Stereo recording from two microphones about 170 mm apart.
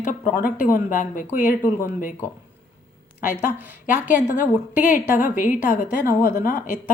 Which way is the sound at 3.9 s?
50° left (ahead or behind).